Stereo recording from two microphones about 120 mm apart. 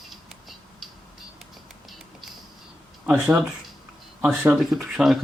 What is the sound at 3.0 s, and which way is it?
Speech, 10° right (ahead or behind).